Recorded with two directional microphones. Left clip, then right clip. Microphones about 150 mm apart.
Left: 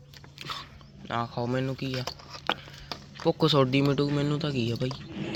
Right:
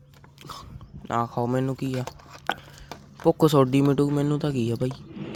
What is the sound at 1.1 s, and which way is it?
Speech, 50° right (ahead or behind).